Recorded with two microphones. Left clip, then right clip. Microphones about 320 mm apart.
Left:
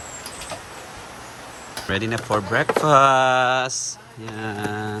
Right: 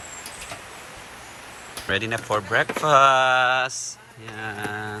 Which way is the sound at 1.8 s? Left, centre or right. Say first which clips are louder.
Even; centre.